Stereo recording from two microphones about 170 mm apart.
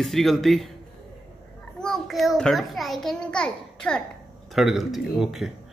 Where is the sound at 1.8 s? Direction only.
Centre (ahead or behind).